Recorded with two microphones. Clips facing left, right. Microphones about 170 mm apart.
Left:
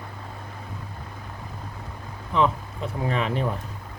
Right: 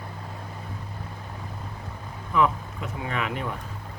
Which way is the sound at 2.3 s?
30° left (ahead or behind).